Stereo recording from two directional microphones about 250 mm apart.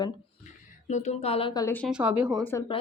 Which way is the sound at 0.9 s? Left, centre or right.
Left.